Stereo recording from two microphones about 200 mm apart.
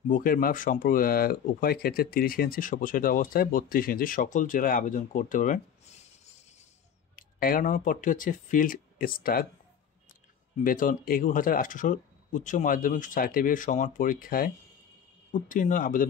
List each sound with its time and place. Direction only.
0.1 s speech: 45° left (ahead or behind)
7.2 s speech: 45° left (ahead or behind)
10.6 s speech: 45° left (ahead or behind)